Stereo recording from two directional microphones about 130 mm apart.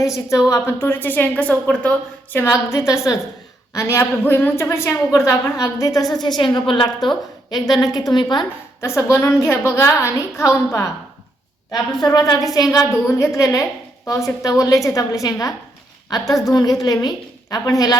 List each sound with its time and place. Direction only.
0.0 s a woman's voice: 25° left (ahead or behind)
8.8 s a woman's voice: 20° left (ahead or behind)
11.9 s a woman's voice: 30° left (ahead or behind)